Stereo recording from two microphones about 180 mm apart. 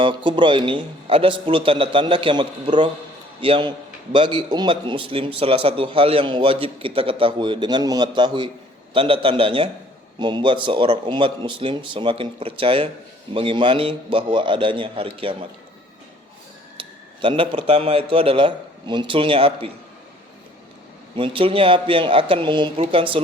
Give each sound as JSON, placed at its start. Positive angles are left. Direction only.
{"t": 0.0, "sound": "a man's voice", "side_deg": -25}
{"t": 16.7, "sound": "speech", "side_deg": -30}
{"t": 21.2, "sound": "a man's voice", "side_deg": -30}